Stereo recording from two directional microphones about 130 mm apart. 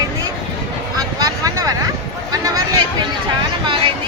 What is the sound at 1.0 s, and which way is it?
Vehicle, 25° right (ahead or behind).